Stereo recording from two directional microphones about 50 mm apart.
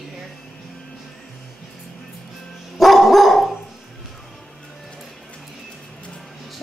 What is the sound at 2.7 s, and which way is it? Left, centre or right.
Dog, centre.